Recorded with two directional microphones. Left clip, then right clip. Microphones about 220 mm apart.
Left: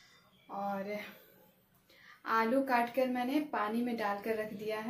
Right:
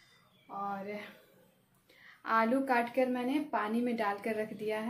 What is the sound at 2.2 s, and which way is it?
A woman's voice, 35° right (ahead or behind).